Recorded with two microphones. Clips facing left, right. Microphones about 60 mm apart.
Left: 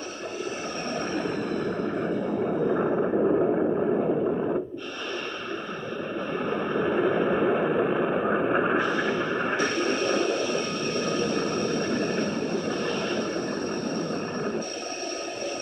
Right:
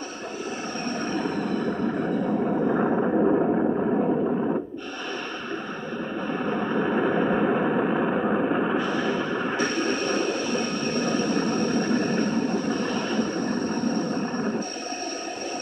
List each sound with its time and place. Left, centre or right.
1.1 s vehicle: right
2.5 s vehicle: right
6.3 s a sound: right
7.4 s vehicle: right
8.2 s vehicle: left
8.5 s a sound: left
10.0 s vehicle: right